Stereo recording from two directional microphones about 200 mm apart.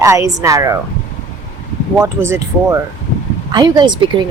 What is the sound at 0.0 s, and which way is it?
Speech, 15° right (ahead or behind).